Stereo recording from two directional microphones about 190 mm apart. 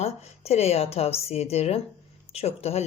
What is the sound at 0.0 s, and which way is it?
A woman's voice, 35° left (ahead or behind).